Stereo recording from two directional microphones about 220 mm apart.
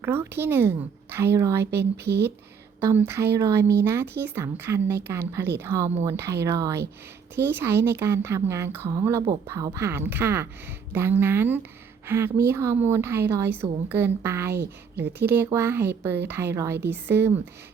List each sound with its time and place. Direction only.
0.0 s a woman's voice: 10° right (ahead or behind)
1.8 s speech: 50° right (ahead or behind)
3.1 s a woman's voice: 10° right (ahead or behind)
14.5 s speech: 50° right (ahead or behind)
15.3 s a woman's voice: 10° right (ahead or behind)